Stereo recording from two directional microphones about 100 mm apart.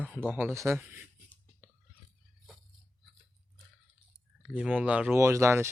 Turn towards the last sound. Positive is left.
turn(degrees=-25)  # may be behind; listen again after turning